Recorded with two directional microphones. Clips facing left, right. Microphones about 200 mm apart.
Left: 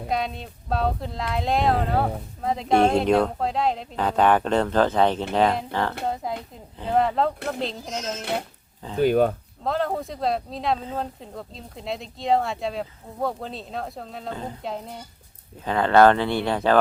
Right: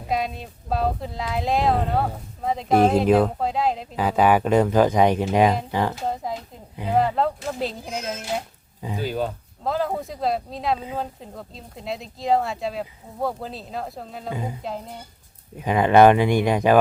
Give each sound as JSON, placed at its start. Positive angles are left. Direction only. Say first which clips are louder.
{"t": 0.1, "sound": "speech", "louder": "right 2 dB", "side_deg": 0}
{"t": 6.2, "sound": "speech", "louder": "even", "side_deg": 0}
{"t": 6.7, "sound": "speech", "louder": "right 1 dB", "side_deg": -10}
{"t": 7.0, "sound": "speech", "louder": "even", "side_deg": 0}
{"t": 9.0, "sound": "speech", "louder": "left 8 dB", "side_deg": 60}
{"t": 9.6, "sound": "speech", "louder": "even", "side_deg": 0}
{"t": 15.5, "sound": "speech", "louder": "right 2 dB", "side_deg": -15}